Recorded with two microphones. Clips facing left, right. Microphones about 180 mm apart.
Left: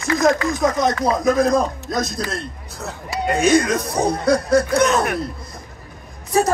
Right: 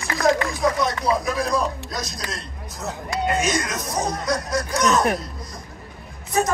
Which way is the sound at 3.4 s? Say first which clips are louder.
Left 9 dB; 60° left (ahead or behind).